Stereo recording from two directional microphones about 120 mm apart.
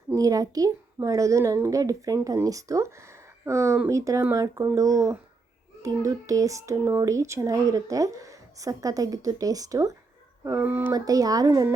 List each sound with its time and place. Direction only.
0.2 s speech: 30° right (ahead or behind)
10.9 s speech: 30° right (ahead or behind)